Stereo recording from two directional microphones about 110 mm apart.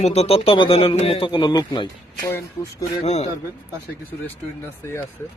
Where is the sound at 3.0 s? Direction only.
90° left.